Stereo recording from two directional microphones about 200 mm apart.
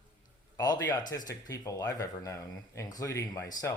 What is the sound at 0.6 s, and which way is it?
Speech, 20° left (ahead or behind).